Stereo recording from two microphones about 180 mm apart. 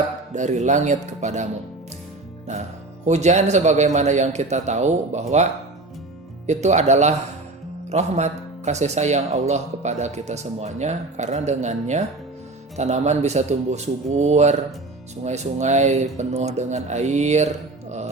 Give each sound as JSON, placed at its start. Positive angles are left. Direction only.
{"t": 0.3, "sound": "speech", "side_deg": -40}
{"t": 3.1, "sound": "speech", "side_deg": -40}
{"t": 6.5, "sound": "speech", "side_deg": -40}